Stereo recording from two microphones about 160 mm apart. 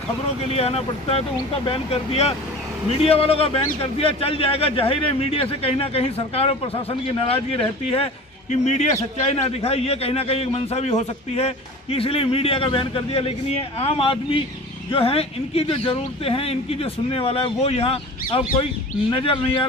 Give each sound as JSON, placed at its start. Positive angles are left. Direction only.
{"t": 0.5, "sound": "a man's voice", "side_deg": 40}